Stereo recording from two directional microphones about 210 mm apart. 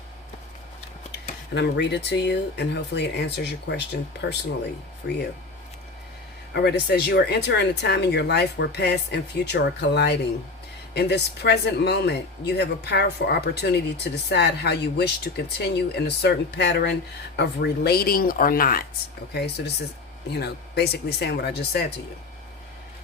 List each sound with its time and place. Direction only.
1.5 s speech: 55° left (ahead or behind)
6.5 s speech: 50° left (ahead or behind)